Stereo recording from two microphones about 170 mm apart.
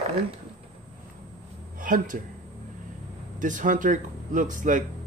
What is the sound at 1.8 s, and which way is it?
Speech, 50° right (ahead or behind).